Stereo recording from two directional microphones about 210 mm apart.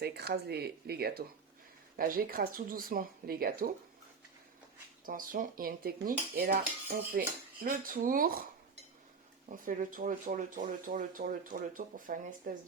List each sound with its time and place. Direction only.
0.0 s speech: 50° right (ahead or behind)
5.0 s speech: 40° right (ahead or behind)
9.5 s speech: 40° right (ahead or behind)